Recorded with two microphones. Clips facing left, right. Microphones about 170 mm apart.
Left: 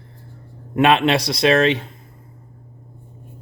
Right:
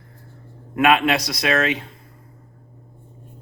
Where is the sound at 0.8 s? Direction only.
30° left (ahead or behind).